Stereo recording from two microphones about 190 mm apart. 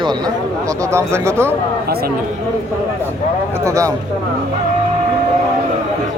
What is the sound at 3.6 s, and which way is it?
Speech, 15° right (ahead or behind).